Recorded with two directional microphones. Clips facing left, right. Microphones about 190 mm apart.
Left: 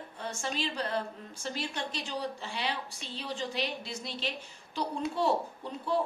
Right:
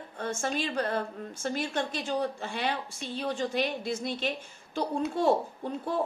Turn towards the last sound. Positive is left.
turn(degrees=-50)  # may be behind; listen again after turning